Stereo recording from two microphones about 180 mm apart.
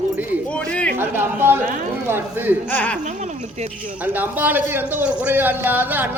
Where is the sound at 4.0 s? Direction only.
10° right (ahead or behind).